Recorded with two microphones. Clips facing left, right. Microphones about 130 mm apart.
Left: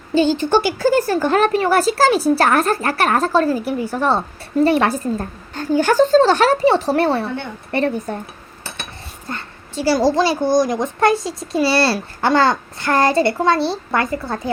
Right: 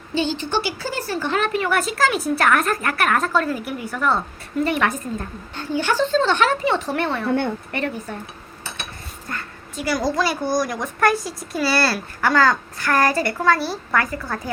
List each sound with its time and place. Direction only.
0.1 s speech: 45° left (ahead or behind)
9.3 s a woman's voice: 30° left (ahead or behind)